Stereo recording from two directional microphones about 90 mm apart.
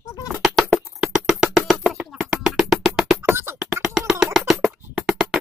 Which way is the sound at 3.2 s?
25° right (ahead or behind).